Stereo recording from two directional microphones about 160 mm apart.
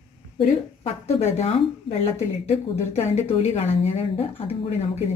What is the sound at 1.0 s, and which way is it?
A woman's voice, 40° left (ahead or behind).